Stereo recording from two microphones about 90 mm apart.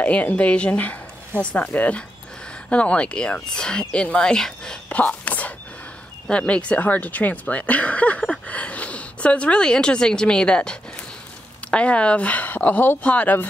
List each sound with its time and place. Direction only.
0.0 s speech: 15° left (ahead or behind)
4.8 s whispering: 15° left (ahead or behind)
6.2 s speech: 10° left (ahead or behind)